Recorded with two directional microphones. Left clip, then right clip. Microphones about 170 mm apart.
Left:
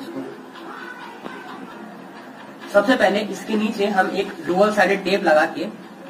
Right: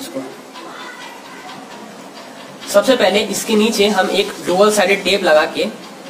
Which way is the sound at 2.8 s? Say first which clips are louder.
Right 5 dB; 80° right.